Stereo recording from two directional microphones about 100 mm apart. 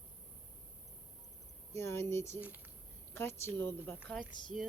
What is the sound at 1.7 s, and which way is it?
Speech, 25° left (ahead or behind).